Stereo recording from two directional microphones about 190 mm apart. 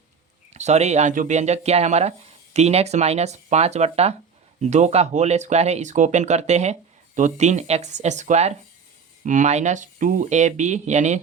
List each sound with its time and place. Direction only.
0.5 s speech: 35° right (ahead or behind)